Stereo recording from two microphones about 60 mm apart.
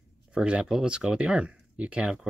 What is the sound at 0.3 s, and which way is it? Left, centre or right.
Speech, centre.